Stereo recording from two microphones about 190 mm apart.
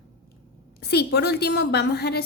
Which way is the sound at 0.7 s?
55° left (ahead or behind).